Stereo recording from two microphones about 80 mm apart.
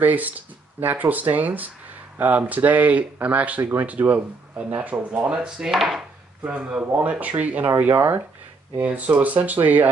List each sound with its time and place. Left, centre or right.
0.0 s speech: right; by 6.0 s centre
6.4 s speech: centre